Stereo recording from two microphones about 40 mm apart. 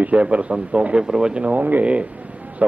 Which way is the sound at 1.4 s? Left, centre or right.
Right.